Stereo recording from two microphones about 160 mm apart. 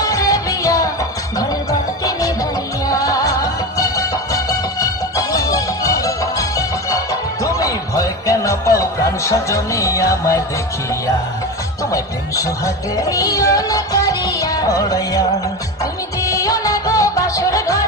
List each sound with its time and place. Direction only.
0.0 s music: 20° left (ahead or behind)
11.9 s music: 20° left (ahead or behind)